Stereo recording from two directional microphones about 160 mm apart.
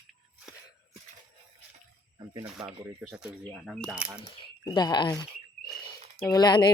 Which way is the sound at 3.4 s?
5° left (ahead or behind).